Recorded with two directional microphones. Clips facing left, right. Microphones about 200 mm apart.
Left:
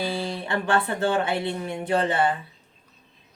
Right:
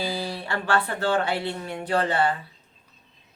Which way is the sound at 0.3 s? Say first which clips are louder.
Left 1 dB; 20° left (ahead or behind).